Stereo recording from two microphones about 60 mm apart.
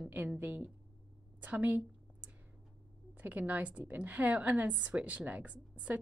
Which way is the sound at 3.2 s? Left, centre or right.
Right.